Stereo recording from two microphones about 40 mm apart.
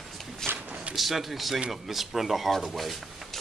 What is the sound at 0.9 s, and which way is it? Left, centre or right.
Speech, centre.